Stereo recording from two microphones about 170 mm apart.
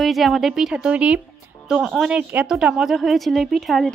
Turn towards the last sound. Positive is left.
turn(degrees=0)  # may be behind; listen again after turning